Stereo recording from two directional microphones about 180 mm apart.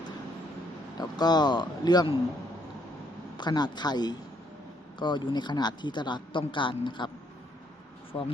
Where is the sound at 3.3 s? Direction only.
25° left (ahead or behind).